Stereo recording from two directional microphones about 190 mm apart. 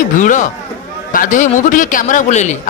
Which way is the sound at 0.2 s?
45° left (ahead or behind).